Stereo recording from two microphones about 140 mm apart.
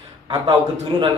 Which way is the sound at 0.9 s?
30° right (ahead or behind).